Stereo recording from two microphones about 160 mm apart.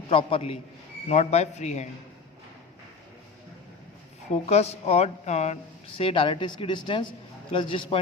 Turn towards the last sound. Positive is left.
turn(degrees=30)  # may be behind; listen again after turning